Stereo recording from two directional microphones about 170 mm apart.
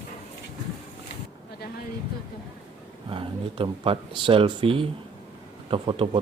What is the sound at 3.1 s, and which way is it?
Speech, 30° right (ahead or behind).